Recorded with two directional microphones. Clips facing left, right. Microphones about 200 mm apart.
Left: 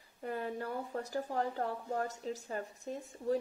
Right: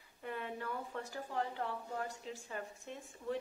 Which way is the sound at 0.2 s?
40° left (ahead or behind).